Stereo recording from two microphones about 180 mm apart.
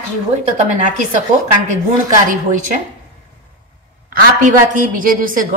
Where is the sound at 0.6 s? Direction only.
40° right (ahead or behind).